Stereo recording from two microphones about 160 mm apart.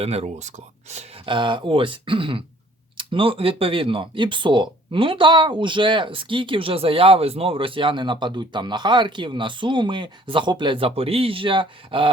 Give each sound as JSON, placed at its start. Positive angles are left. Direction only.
{"t": 0.0, "sound": "speech", "side_deg": -40}